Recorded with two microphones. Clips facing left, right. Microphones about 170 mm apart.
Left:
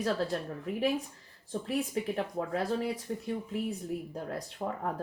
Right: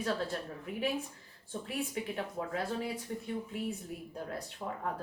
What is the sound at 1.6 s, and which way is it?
Speech, 40° left (ahead or behind).